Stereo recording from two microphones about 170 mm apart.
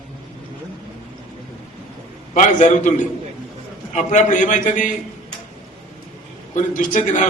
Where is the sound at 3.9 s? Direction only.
45° left (ahead or behind).